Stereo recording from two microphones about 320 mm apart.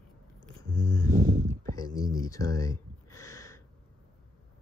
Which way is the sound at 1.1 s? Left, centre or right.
Right.